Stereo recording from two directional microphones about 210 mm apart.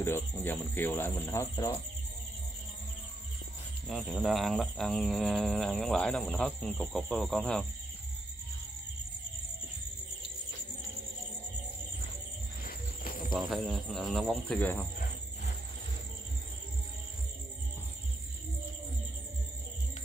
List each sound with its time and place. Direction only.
0.0 s speech: 10° left (ahead or behind)
3.8 s speech: centre (ahead or behind)
12.6 s cricket: 40° left (ahead or behind)
13.3 s speech: centre (ahead or behind)